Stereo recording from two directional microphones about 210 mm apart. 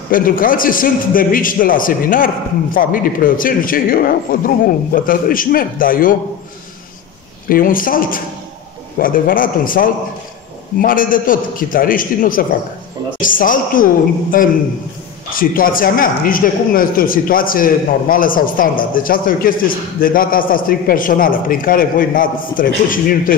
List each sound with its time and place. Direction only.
0.1 s speech: 40° left (ahead or behind)
7.4 s speech: 40° left (ahead or behind)